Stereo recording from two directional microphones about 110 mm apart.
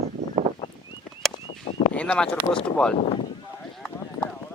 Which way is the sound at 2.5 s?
10° left (ahead or behind).